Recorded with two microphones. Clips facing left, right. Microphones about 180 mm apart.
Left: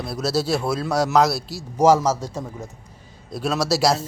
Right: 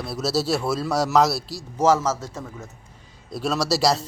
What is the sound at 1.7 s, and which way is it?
Speech, 15° left (ahead or behind).